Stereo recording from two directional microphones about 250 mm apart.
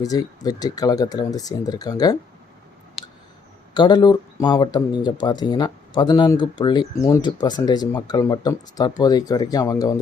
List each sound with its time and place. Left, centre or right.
0.0 s speech: centre
3.8 s speech: centre